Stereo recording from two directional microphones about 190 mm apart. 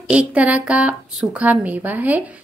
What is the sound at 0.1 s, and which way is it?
A woman's voice, 5° right (ahead or behind).